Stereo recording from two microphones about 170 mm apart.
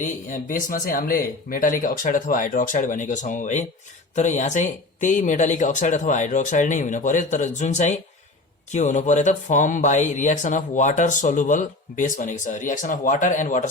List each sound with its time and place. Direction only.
0.0 s speech: 50° left (ahead or behind)